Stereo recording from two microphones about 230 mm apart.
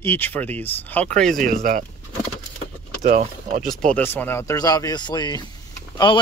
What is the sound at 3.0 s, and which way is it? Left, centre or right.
Speech, right.